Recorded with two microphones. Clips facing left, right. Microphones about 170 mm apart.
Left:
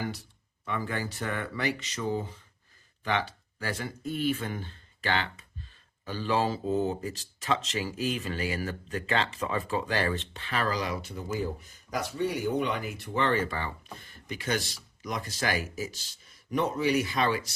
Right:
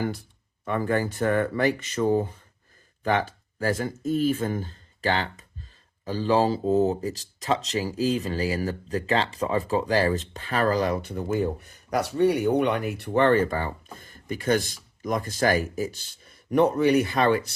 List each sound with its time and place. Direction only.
0.6 s speech: 50° right (ahead or behind)